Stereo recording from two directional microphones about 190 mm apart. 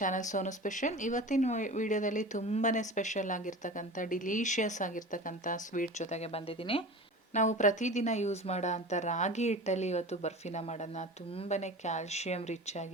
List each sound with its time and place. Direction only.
0.0 s speech: 40° left (ahead or behind)
7.3 s speech: 40° left (ahead or behind)